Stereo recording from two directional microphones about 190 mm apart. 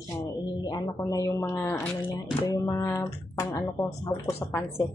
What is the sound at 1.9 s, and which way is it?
Music, 10° left (ahead or behind).